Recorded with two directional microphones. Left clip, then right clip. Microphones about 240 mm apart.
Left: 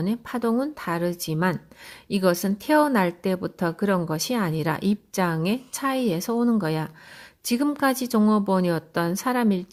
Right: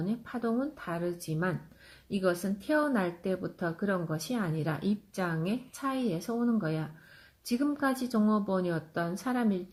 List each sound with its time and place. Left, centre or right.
0.0 s speech: left